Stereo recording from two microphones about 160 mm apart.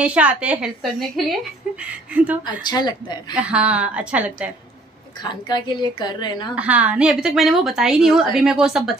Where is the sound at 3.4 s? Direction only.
10° right (ahead or behind).